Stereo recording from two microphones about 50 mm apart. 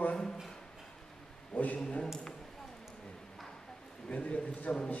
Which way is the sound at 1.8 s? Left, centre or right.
Centre.